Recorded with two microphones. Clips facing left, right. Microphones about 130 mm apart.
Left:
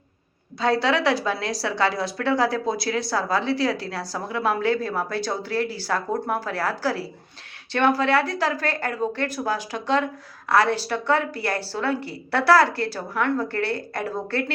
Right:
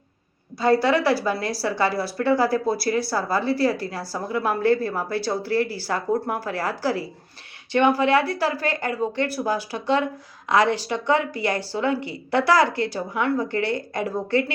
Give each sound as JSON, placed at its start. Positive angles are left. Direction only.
{"t": 0.6, "sound": "speech", "side_deg": -10}